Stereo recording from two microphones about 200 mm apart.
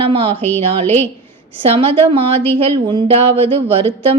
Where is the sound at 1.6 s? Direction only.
25° right (ahead or behind).